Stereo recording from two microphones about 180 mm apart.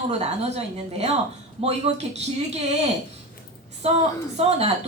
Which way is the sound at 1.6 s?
35° right (ahead or behind).